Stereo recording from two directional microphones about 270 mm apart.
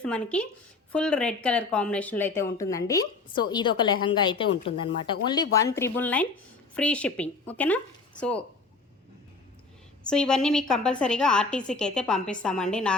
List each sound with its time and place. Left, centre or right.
0.0 s a woman's voice: centre
10.0 s a woman's voice: centre